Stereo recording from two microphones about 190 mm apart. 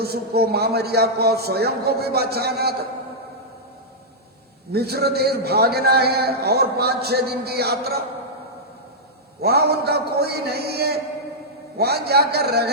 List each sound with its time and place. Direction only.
0.0 s a man's voice: 55° right (ahead or behind)
4.7 s a man's voice: 55° right (ahead or behind)
9.4 s a man's voice: 55° right (ahead or behind)